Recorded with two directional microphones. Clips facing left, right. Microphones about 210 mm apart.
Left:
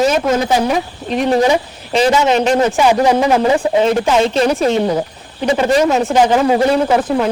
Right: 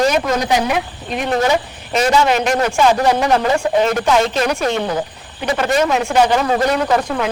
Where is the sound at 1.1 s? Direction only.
35° left (ahead or behind).